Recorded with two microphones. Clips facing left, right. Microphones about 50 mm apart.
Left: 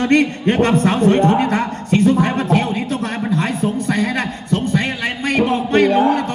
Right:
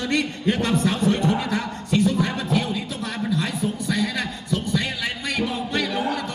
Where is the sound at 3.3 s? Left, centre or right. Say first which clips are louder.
Left 7 dB; left.